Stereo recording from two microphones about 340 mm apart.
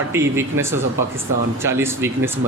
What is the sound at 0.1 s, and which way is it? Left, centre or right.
Speech, centre.